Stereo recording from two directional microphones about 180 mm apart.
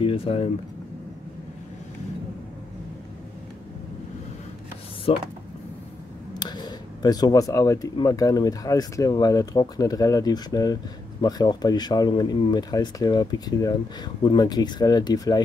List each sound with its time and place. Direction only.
0.0 s speech: 30° left (ahead or behind)
5.1 s speech: 35° left (ahead or behind)
6.4 s speech: 25° left (ahead or behind)